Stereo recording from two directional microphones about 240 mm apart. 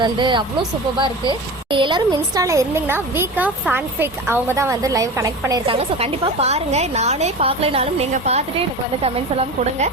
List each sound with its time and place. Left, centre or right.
0.0 s speech: centre